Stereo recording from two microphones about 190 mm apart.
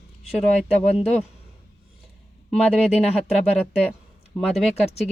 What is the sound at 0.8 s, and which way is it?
Speech, 35° left (ahead or behind).